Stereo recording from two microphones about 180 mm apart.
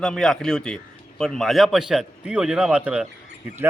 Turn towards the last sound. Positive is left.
turn(degrees=-5)  # may be behind; listen again after turning